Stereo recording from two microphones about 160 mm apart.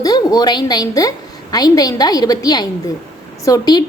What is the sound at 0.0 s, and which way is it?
A woman's voice, 25° left (ahead or behind).